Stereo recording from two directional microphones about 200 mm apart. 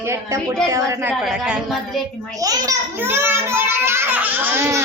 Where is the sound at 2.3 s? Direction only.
15° right (ahead or behind).